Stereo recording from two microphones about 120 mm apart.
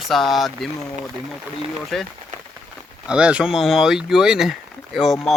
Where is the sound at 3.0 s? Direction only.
10° right (ahead or behind).